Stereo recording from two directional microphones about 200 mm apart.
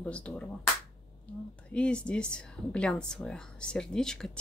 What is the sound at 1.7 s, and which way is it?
Speech, 5° left (ahead or behind).